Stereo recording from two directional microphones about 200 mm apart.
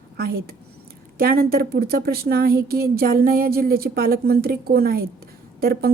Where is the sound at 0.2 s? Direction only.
50° right (ahead or behind).